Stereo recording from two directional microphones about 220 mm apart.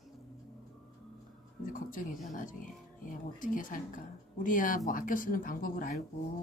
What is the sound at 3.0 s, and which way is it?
Speech, 40° left (ahead or behind).